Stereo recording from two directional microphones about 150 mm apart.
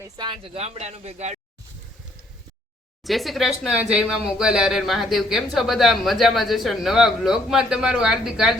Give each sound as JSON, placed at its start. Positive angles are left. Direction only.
{"t": 0.0, "sound": "speech", "side_deg": -30}
{"t": 0.5, "sound": "speech", "side_deg": -45}
{"t": 3.0, "sound": "speech", "side_deg": 0}